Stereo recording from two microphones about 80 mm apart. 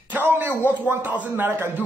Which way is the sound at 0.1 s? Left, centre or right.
Right.